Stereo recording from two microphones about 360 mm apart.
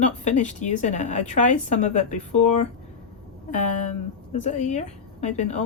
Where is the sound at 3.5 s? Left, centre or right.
Centre.